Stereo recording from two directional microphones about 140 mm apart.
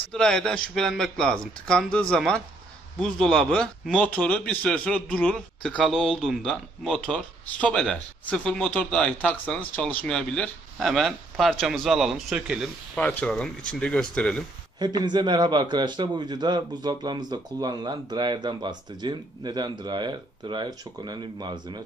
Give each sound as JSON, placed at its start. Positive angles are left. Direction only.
{"t": 0.1, "sound": "speech", "side_deg": 5}
{"t": 4.0, "sound": "a man's voice", "side_deg": 10}
{"t": 12.9, "sound": "a man's voice", "side_deg": 5}
{"t": 14.8, "sound": "a man's voice", "side_deg": -30}